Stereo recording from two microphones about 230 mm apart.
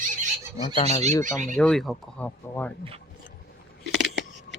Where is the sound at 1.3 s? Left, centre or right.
Centre.